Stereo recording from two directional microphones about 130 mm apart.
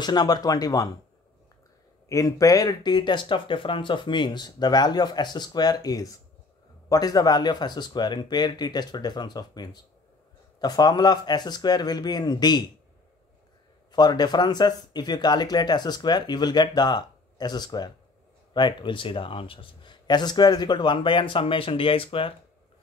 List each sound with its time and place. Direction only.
0.0 s speech: 30° left (ahead or behind)
2.0 s speech: 25° left (ahead or behind)
13.9 s speech: 35° left (ahead or behind)